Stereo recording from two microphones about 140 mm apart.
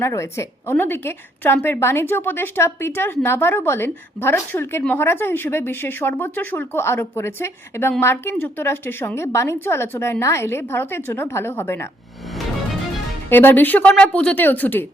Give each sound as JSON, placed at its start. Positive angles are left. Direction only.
{"t": 0.0, "sound": "speech", "side_deg": 20}
{"t": 13.3, "sound": "speech", "side_deg": 15}